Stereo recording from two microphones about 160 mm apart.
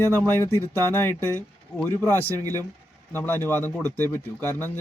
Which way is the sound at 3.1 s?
15° left (ahead or behind).